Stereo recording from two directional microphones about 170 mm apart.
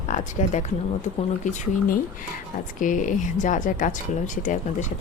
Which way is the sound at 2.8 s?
50° left (ahead or behind).